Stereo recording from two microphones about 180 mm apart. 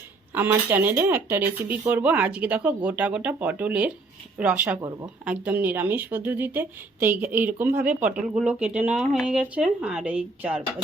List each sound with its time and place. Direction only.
0.3 s a woman's voice: 10° right (ahead or behind)
4.8 s speech: 20° right (ahead or behind)
5.2 s a woman's voice: 10° right (ahead or behind)